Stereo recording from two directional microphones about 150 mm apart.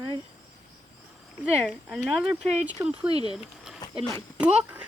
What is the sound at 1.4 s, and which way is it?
Speech, 5° right (ahead or behind).